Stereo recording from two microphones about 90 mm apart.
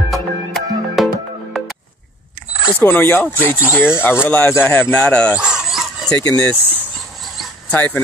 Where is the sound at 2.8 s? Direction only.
25° left (ahead or behind).